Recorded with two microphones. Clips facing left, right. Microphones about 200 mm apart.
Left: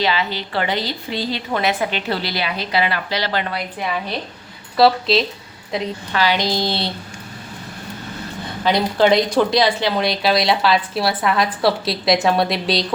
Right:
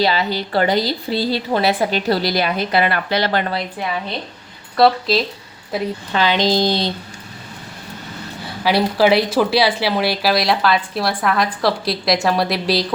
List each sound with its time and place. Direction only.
0.0 s a woman's voice: 40° right (ahead or behind)
4.8 s speech: centre (ahead or behind)
6.1 s speech: 20° right (ahead or behind)
8.6 s speech: 5° right (ahead or behind)